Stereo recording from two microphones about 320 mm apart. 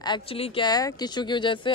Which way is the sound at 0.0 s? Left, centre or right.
Centre.